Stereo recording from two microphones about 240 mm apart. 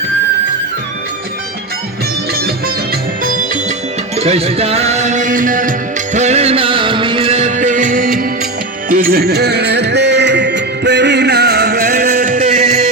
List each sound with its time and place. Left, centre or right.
4.2 s music: right